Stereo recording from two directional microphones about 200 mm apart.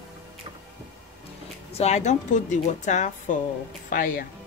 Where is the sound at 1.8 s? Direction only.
35° left (ahead or behind).